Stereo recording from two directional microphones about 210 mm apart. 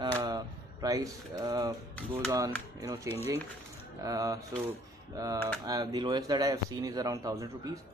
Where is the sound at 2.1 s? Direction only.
15° right (ahead or behind).